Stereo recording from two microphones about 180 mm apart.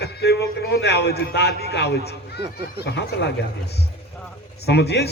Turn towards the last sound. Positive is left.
turn(degrees=65)  # may be behind; listen again after turning